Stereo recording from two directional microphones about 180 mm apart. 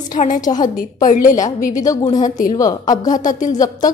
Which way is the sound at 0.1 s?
45° left (ahead or behind).